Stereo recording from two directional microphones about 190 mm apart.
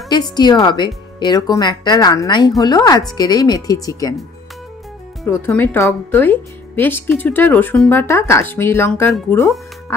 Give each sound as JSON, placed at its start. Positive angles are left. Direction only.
{"t": 0.1, "sound": "speech", "side_deg": 20}
{"t": 5.2, "sound": "speech", "side_deg": 15}